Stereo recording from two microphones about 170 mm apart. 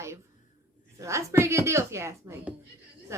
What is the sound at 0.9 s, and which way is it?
Speech, 15° right (ahead or behind).